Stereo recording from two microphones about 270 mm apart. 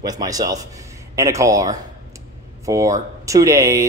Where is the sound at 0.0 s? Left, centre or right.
Centre.